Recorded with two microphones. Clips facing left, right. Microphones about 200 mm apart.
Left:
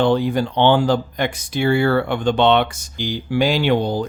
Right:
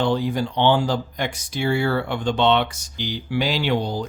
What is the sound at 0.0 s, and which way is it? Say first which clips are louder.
Speech: left 4 dB; 60° left (ahead or behind).